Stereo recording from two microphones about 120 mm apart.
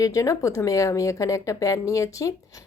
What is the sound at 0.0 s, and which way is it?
A woman's voice, 30° left (ahead or behind).